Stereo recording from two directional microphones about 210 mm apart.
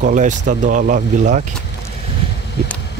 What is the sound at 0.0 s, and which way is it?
Speech, 35° right (ahead or behind).